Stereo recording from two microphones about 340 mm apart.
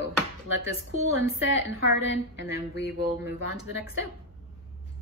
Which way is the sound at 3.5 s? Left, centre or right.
Right.